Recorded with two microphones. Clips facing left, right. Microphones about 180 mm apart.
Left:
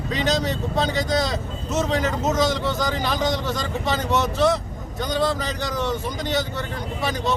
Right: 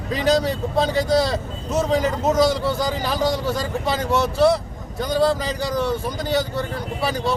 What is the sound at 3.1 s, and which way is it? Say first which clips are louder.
Speech: right 3 dB; 35° right (ahead or behind).